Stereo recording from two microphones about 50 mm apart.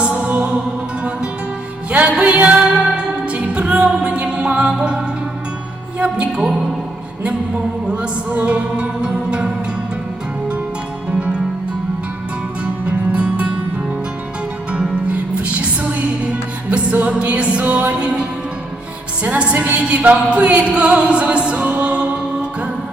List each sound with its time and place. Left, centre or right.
0.0 s music: right
2.0 s music: right
6.3 s speech: centre
7.9 s music: right
11.1 s music: right
12.6 s music: right
15.1 s music: right
17.9 s music: right
19.5 s a woman's voice: right
19.8 s music: right